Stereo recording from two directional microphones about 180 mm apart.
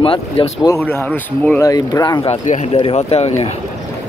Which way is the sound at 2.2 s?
30° left (ahead or behind).